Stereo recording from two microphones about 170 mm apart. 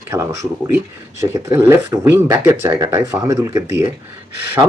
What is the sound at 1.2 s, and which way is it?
Speech, 15° right (ahead or behind).